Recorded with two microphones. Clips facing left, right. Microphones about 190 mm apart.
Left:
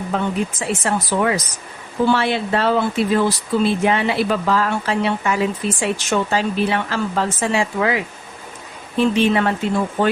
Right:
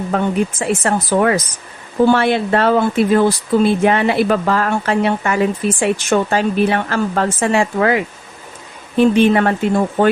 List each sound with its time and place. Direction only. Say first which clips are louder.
0.1 s speech: right 4 dB; 50° right (ahead or behind)